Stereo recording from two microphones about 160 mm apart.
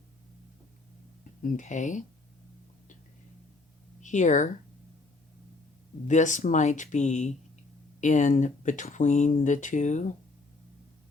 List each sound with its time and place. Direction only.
1.4 s speech: 55° left (ahead or behind)
4.0 s speech: 50° left (ahead or behind)
6.1 s speech: 50° left (ahead or behind)